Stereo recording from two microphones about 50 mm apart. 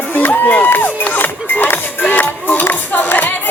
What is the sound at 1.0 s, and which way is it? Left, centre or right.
Music, left.